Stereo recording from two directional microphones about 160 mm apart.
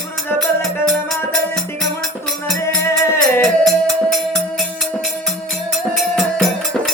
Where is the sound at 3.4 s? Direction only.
Centre (ahead or behind).